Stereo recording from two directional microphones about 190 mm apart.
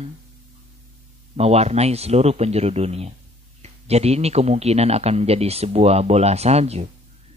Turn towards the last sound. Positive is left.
turn(degrees=-35)  # may be behind; listen again after turning